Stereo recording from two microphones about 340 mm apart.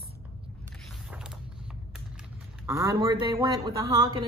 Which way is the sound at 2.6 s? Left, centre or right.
Centre.